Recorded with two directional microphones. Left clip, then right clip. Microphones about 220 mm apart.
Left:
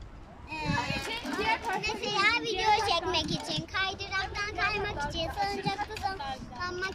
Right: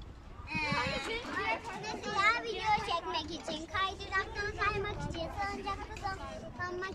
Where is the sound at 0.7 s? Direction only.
35° left (ahead or behind).